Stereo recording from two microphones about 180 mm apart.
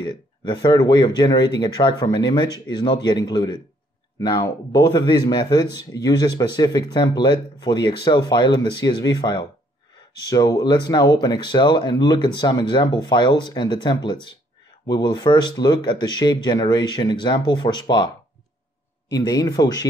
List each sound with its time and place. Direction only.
0.0 s speech: 25° left (ahead or behind)